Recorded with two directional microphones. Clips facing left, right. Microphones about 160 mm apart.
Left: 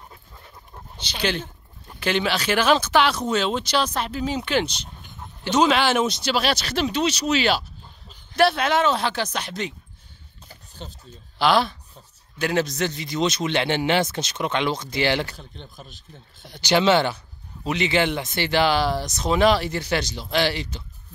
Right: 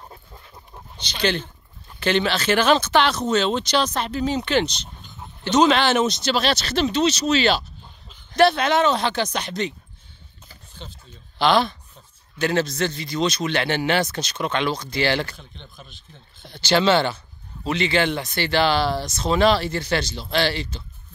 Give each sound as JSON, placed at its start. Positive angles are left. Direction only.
{"t": 0.9, "sound": "speech", "side_deg": 5}
{"t": 10.5, "sound": "a sound", "side_deg": 40}
{"t": 11.3, "sound": "a man's voice", "side_deg": 5}
{"t": 15.7, "sound": "speech", "side_deg": 40}
{"t": 16.4, "sound": "speech", "side_deg": 15}